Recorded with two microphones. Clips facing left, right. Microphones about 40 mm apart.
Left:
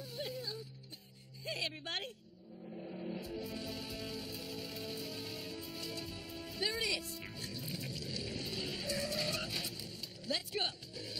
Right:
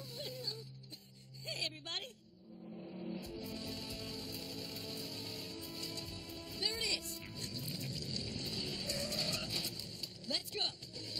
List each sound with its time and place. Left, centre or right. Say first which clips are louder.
0.0 s music: left 3 dB; centre